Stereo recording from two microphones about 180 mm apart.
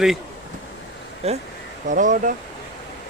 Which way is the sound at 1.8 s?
45° right (ahead or behind).